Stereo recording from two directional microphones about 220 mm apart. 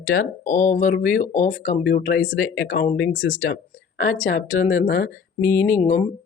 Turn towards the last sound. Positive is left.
turn(degrees=35)  # may be behind; listen again after turning